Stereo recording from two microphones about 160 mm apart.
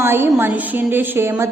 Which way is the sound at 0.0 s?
15° right (ahead or behind).